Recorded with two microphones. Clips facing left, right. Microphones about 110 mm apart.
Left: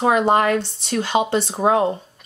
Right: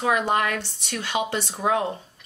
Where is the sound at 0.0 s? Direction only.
30° left (ahead or behind).